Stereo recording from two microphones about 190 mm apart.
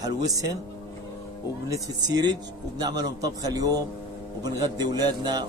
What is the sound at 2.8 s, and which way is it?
Speech, 20° right (ahead or behind).